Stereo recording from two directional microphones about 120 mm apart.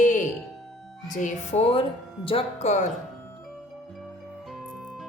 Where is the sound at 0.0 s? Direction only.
90° left.